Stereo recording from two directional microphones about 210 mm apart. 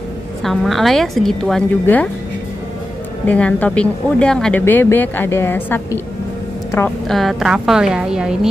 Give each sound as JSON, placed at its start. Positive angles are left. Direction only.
{"t": 0.4, "sound": "a woman's voice", "side_deg": 0}
{"t": 3.3, "sound": "speech", "side_deg": 5}
{"t": 7.1, "sound": "a woman's voice", "side_deg": 0}